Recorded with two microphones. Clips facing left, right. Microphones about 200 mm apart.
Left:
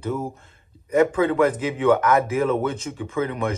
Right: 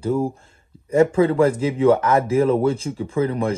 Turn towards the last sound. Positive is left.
turn(degrees=-30)  # may be behind; listen again after turning